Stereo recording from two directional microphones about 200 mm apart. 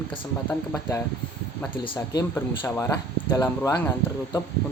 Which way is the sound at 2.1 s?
15° left (ahead or behind).